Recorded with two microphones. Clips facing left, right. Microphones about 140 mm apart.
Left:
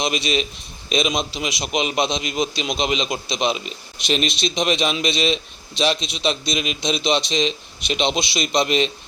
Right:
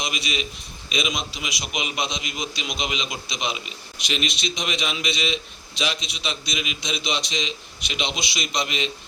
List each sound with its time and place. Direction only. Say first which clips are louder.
0.0 s a man's voice: left 7 dB; 25° left (ahead or behind)